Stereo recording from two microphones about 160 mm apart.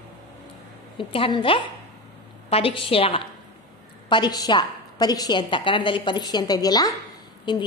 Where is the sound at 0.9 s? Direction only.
30° left (ahead or behind).